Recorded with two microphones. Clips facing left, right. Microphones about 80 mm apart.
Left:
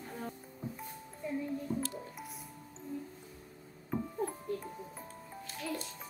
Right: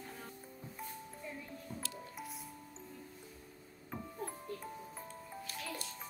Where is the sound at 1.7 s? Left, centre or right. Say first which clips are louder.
Left 10 dB; left.